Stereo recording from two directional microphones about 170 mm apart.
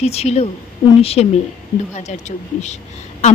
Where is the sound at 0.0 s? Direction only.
40° left (ahead or behind).